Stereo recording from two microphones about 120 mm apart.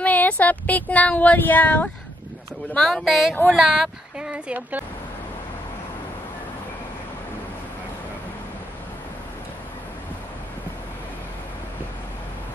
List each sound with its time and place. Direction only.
0.0 s speech: 10° left (ahead or behind)
2.7 s speech: 5° left (ahead or behind)